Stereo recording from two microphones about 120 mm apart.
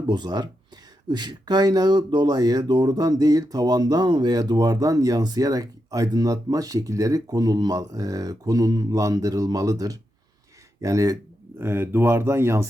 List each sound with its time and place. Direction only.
0.1 s speech: 35° right (ahead or behind)
11.5 s speech: 20° right (ahead or behind)